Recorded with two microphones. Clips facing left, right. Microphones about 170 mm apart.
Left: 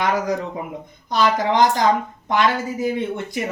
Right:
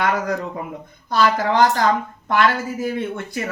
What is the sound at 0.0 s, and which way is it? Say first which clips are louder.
Speech: even; 20° left (ahead or behind).